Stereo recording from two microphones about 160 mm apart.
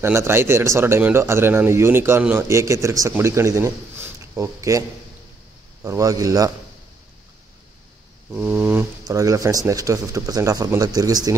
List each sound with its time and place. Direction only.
0.0 s speech: 15° right (ahead or behind)
5.9 s speech: 20° right (ahead or behind)
8.3 s speech: 5° right (ahead or behind)
9.0 s speech: 20° right (ahead or behind)